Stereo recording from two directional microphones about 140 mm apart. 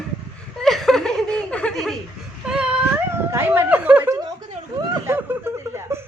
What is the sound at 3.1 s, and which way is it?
Speech, 15° right (ahead or behind).